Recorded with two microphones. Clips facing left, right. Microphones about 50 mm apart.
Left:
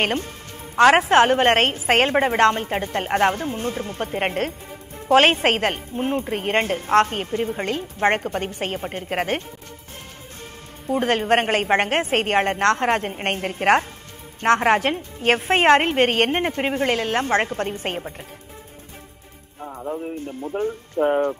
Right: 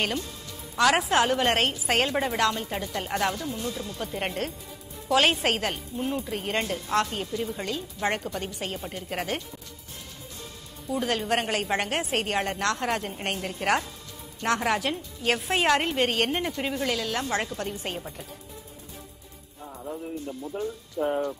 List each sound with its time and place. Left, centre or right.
0.0 s a woman's voice: left
10.9 s a woman's voice: left
19.6 s a man's voice: left
20.5 s a woman's voice: left